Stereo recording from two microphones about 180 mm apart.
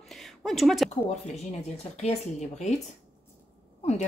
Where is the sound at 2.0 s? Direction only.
40° left (ahead or behind).